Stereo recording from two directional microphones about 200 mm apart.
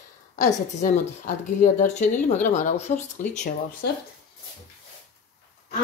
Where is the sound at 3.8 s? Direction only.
55° left (ahead or behind).